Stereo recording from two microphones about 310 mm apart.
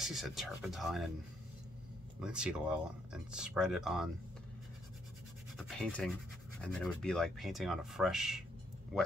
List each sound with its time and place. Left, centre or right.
0.0 s speech: centre
2.1 s speech: centre
5.6 s speech: centre